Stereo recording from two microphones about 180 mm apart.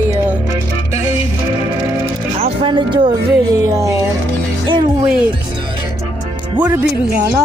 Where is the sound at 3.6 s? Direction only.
15° right (ahead or behind).